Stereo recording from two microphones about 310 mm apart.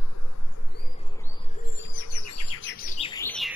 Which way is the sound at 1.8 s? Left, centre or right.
Left.